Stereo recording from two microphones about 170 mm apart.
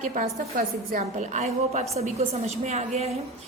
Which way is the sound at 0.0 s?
50° right (ahead or behind).